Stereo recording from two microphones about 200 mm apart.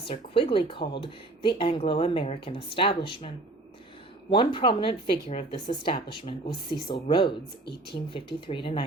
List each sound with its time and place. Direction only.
0.1 s speech: 25° left (ahead or behind)